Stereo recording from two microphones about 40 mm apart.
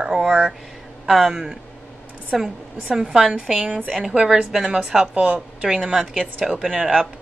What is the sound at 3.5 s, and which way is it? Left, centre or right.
Speech, right.